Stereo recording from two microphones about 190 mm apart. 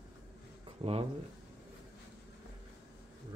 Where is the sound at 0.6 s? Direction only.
30° right (ahead or behind).